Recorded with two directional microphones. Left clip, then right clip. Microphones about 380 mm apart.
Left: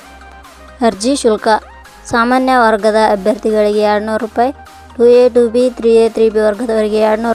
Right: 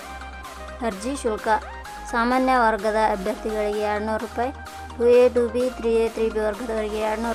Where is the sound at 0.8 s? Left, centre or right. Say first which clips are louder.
Left 14 dB; centre.